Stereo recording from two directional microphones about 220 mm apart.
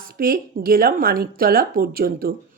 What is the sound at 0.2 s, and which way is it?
Speech, 40° right (ahead or behind).